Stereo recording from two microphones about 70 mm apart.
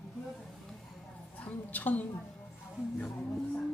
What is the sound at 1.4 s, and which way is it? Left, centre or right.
Speech, left.